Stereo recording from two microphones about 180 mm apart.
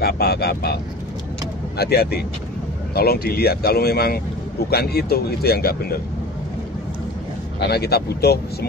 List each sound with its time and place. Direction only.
0.0 s speech: 60° left (ahead or behind)
1.8 s speech: 60° left (ahead or behind)
7.6 s speech: 65° left (ahead or behind)